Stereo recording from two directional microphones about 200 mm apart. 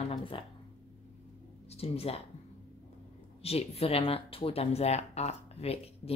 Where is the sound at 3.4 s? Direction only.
30° left (ahead or behind).